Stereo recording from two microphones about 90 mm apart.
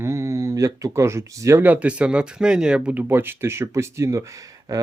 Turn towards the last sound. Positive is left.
turn(degrees=-40)  # may be behind; listen again after turning